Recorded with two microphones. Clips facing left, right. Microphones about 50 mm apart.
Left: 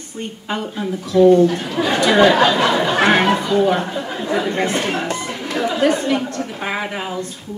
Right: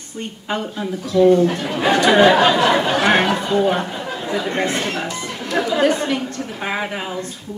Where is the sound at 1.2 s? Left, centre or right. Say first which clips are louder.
Left 2 dB; right.